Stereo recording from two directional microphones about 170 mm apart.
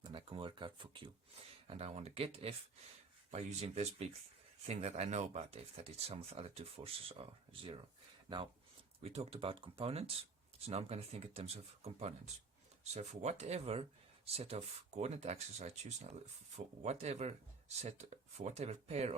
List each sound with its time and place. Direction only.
0.0 s speech: 30° right (ahead or behind)
9.0 s speech: 35° right (ahead or behind)